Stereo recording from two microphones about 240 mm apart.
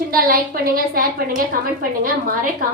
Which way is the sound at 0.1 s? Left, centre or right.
Right.